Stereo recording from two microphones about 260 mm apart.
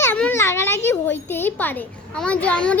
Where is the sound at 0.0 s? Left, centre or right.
Centre.